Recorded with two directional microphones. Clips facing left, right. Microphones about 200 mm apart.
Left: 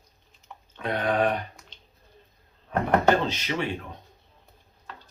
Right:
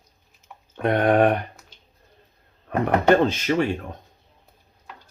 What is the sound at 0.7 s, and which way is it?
Speech, 55° right (ahead or behind).